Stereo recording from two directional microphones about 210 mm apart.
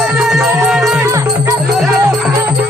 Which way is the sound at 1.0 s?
15° right (ahead or behind).